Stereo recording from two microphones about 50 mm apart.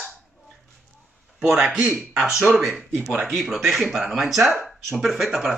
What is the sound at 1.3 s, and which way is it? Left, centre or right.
A man's voice, right.